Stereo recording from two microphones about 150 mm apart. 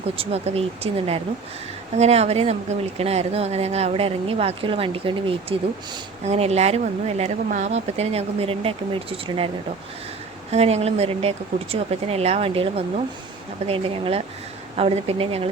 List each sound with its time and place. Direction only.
0.2 s speech: 45° right (ahead or behind)
10.5 s a woman's voice: 45° right (ahead or behind)